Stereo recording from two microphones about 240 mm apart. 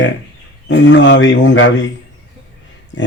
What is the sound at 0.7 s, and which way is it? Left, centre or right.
A man's voice, left.